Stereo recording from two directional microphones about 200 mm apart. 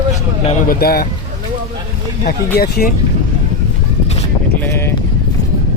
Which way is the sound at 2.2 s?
50° left (ahead or behind).